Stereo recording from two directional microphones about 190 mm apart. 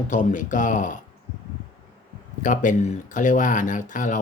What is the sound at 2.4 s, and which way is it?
Speech, 40° left (ahead or behind).